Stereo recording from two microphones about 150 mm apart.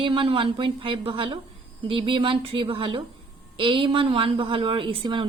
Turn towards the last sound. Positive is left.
turn(degrees=-35)  # may be behind; listen again after turning